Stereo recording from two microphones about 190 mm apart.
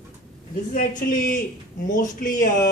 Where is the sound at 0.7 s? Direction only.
45° left (ahead or behind).